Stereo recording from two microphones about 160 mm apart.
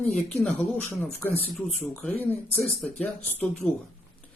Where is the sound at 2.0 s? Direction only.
10° left (ahead or behind).